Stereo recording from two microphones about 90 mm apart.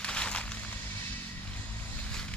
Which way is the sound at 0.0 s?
10° left (ahead or behind).